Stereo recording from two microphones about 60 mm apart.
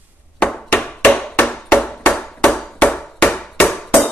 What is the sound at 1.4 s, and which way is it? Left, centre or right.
Chop, centre.